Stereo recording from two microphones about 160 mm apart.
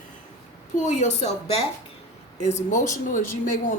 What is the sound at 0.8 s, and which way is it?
Speech, 45° left (ahead or behind).